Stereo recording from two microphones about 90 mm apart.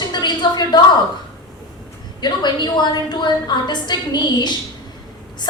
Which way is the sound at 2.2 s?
55° left (ahead or behind).